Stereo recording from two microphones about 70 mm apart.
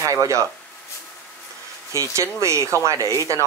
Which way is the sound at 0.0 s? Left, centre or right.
Right.